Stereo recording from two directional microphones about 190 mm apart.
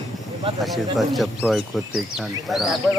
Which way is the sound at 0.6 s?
Centre (ahead or behind).